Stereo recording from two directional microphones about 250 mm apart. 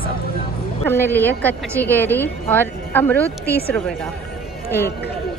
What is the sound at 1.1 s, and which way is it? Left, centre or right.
Speech, centre.